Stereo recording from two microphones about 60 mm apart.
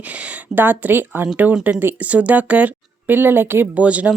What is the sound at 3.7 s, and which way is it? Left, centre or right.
Speech, right.